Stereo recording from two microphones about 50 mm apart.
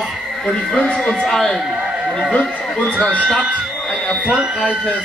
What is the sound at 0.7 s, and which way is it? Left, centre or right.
Speech, left.